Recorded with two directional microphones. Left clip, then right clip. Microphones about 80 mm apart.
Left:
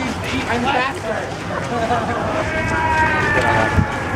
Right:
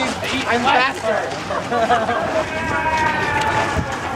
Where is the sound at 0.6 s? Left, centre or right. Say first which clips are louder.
Right 4 dB; right.